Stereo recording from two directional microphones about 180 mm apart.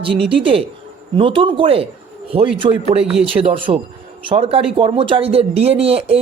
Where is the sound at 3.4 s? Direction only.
30° right (ahead or behind).